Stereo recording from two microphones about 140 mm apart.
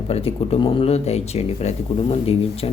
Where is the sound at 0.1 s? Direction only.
45° left (ahead or behind).